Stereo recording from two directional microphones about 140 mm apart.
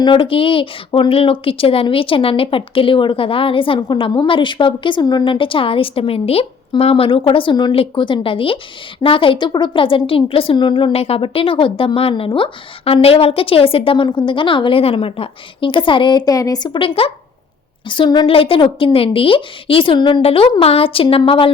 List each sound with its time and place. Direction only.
0.0 s speech: 35° left (ahead or behind)